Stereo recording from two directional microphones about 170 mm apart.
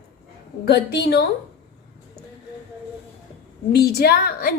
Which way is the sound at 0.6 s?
70° left (ahead or behind).